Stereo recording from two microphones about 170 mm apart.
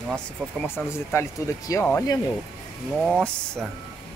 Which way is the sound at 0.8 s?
10° left (ahead or behind).